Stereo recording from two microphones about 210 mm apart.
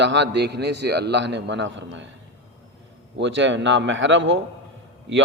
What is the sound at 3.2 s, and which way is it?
A man's voice, 60° right (ahead or behind).